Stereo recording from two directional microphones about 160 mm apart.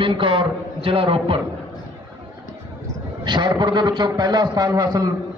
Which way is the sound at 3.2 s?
30° right (ahead or behind).